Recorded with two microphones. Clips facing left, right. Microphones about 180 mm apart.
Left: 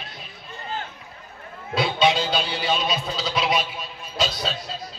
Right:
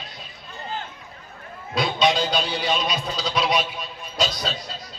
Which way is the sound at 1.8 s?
25° left (ahead or behind).